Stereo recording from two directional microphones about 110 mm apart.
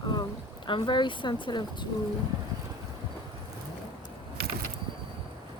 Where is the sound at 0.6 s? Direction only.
45° left (ahead or behind).